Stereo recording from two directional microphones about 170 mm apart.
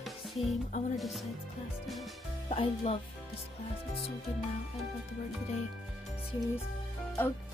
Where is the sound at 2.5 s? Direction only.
35° left (ahead or behind).